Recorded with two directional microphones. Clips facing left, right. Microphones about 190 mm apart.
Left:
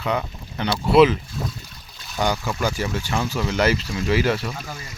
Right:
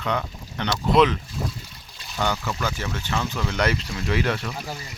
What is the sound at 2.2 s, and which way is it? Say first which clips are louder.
Speech: left 3 dB; 15° left (ahead or behind).